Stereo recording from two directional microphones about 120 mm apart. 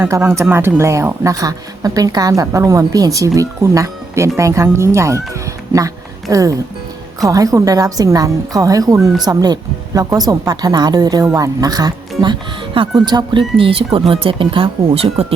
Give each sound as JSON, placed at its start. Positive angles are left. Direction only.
{"t": 0.0, "sound": "speech", "side_deg": -20}
{"t": 6.3, "sound": "speech", "side_deg": -30}
{"t": 13.6, "sound": "speech", "side_deg": -45}